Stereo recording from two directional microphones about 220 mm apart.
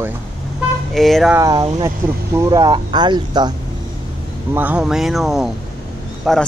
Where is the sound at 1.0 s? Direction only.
Centre (ahead or behind).